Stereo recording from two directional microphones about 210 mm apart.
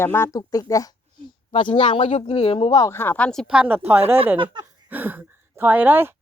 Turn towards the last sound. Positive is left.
turn(degrees=-10)  # may be behind; listen again after turning